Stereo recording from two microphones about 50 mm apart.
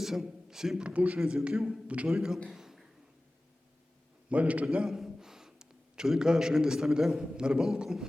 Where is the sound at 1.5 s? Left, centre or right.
Centre.